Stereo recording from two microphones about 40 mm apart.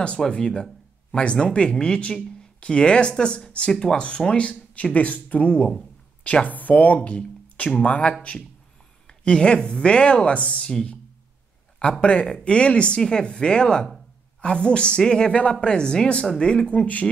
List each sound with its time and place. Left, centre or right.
0.3 s speech: left
4.4 s speech: left
9.0 s speech: left
12.0 s speech: left
16.7 s speech: left